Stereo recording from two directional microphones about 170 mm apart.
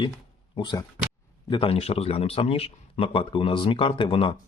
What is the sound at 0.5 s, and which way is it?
A man's voice, 25° left (ahead or behind).